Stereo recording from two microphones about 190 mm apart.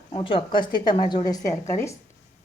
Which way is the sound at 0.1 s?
30° left (ahead or behind).